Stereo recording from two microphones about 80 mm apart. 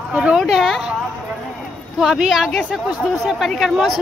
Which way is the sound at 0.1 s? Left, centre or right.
Centre.